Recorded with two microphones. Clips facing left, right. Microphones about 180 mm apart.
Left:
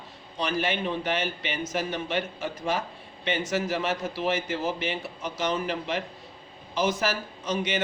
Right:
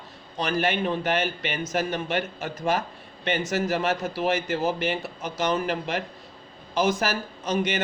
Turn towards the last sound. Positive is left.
turn(degrees=-45)  # may be behind; listen again after turning